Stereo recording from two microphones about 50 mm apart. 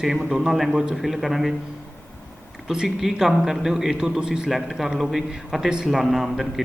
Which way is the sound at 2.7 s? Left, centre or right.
Centre.